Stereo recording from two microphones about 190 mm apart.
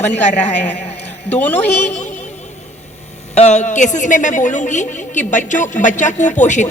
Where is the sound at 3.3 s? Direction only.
35° left (ahead or behind).